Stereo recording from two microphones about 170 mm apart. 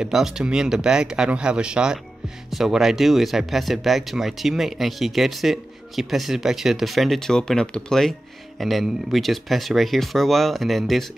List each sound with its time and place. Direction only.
0.0 s speech: 5° right (ahead or behind)